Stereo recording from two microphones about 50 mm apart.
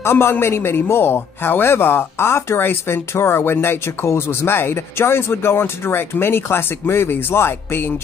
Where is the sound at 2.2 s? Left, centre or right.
Left.